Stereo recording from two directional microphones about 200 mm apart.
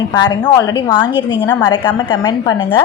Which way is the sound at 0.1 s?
20° left (ahead or behind).